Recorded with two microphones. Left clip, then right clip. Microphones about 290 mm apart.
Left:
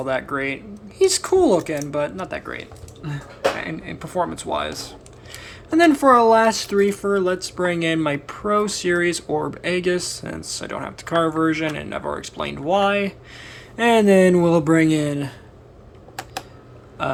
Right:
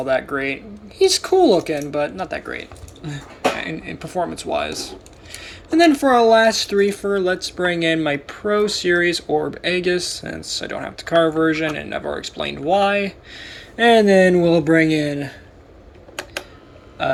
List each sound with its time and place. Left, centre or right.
0.0 s speech: centre